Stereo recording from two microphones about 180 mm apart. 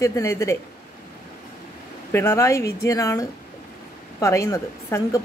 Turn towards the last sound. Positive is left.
turn(degrees=15)  # may be behind; listen again after turning